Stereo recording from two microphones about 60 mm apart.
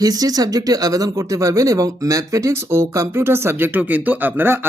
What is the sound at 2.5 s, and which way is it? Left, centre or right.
Speech, right.